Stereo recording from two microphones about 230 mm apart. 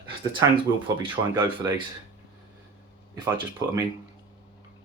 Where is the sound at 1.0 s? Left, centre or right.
Right.